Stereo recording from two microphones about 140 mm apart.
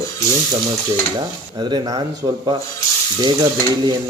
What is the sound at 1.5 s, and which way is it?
A man's voice, 30° right (ahead or behind).